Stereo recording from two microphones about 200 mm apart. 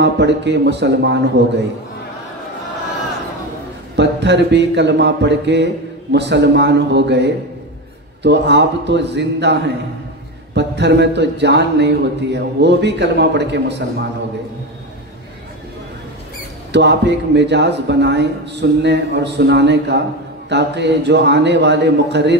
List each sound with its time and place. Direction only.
0.0 s speech: 60° right (ahead or behind)
3.9 s a sound: 60° right (ahead or behind)
6.1 s speech: 60° right (ahead or behind)
16.7 s speech: 60° right (ahead or behind)